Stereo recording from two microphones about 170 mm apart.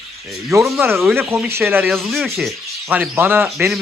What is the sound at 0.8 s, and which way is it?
Speech, 15° right (ahead or behind).